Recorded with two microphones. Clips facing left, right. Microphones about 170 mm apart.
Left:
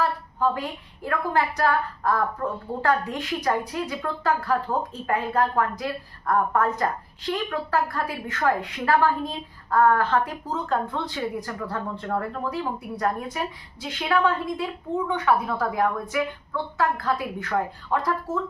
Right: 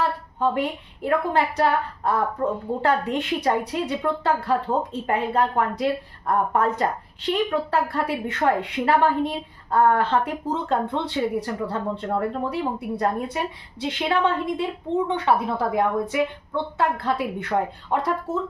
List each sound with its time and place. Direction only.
0.4 s speech: 25° right (ahead or behind)